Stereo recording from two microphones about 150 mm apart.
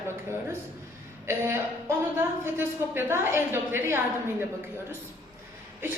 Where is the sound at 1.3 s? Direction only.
15° right (ahead or behind).